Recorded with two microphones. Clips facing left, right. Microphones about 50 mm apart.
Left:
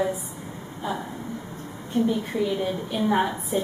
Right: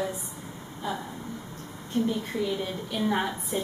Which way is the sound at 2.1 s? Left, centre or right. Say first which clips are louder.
Left 4 dB; centre.